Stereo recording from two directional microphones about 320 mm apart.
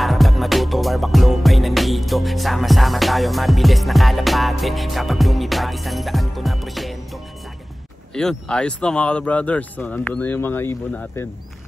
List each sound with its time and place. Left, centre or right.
0.0 s music: centre
8.1 s speech: centre